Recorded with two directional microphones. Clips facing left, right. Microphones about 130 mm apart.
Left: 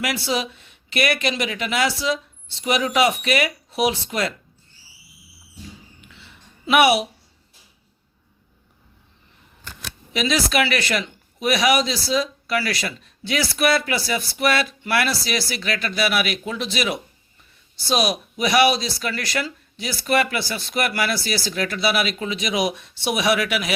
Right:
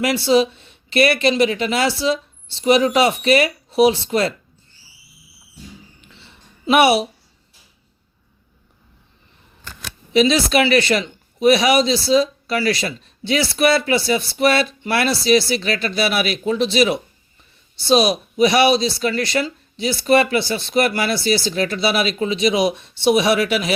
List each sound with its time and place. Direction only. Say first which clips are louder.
0.0 s speech: right 9 dB; 25° right (ahead or behind)
6.0 s a sound: even; 30° right (ahead or behind)
10.1 s speech: right 7 dB; 25° right (ahead or behind)